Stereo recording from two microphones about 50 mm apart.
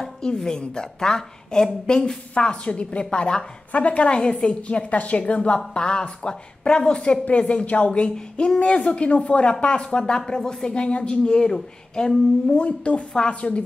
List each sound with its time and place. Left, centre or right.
0.0 s a woman's voice: centre